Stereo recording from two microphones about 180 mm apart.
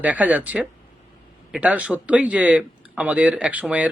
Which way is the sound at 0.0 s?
10° right (ahead or behind).